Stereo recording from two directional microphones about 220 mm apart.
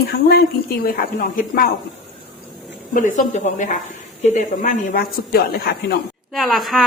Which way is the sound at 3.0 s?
35° left (ahead or behind).